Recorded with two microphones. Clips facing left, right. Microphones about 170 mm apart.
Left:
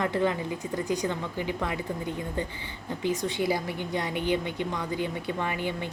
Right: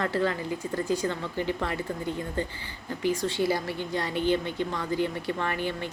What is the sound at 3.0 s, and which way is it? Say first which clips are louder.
Speech: right 2 dB; 20° left (ahead or behind).